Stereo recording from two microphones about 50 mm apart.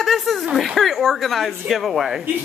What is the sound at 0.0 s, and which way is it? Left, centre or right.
Speech, centre.